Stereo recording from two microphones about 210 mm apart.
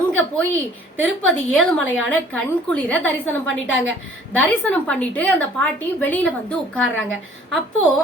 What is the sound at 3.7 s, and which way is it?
Speech, 65° left (ahead or behind).